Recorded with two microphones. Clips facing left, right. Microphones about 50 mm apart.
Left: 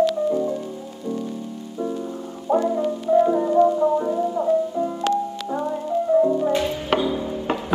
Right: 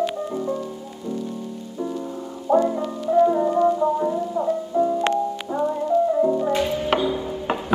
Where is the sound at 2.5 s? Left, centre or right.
Left.